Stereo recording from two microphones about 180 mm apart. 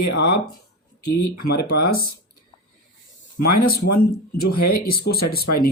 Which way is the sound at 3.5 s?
55° left (ahead or behind).